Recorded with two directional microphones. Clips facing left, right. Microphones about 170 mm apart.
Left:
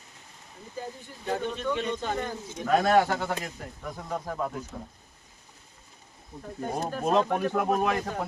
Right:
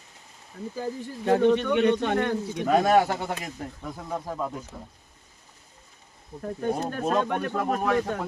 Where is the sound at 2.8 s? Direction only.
20° right (ahead or behind).